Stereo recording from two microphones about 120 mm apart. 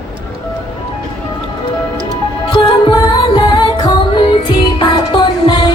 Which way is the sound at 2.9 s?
40° left (ahead or behind).